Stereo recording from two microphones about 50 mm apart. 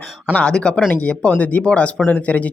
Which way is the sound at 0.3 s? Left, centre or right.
Left.